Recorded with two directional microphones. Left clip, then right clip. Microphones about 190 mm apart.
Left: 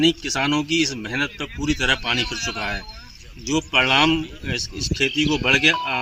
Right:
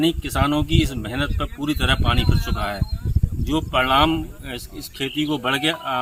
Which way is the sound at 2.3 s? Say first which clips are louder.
Left 3 dB; 35° right (ahead or behind).